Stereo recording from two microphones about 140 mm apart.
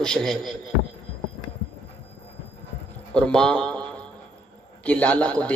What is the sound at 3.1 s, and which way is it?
A man's voice, 5° left (ahead or behind).